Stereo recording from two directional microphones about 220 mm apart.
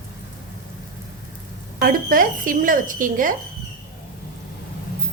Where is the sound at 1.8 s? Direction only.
40° right (ahead or behind).